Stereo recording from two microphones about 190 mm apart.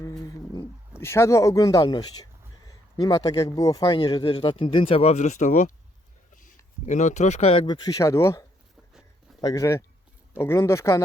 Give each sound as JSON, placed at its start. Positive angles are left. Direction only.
{"t": 0.0, "sound": "dog", "side_deg": 15}
{"t": 2.6, "sound": "a man's voice", "side_deg": 20}
{"t": 6.8, "sound": "a man's voice", "side_deg": 40}